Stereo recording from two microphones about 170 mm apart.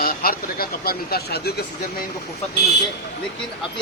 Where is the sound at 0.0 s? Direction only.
60° left (ahead or behind).